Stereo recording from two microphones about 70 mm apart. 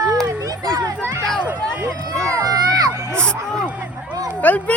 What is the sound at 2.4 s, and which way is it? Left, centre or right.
Music, right.